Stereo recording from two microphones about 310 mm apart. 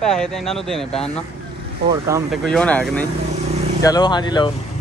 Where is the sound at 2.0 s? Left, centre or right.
Centre.